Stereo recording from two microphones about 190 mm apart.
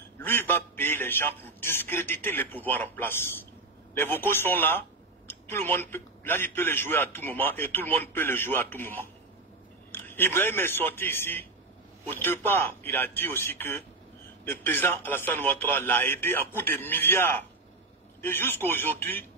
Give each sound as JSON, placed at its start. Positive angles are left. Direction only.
{"t": 0.2, "sound": "a man's voice", "side_deg": 10}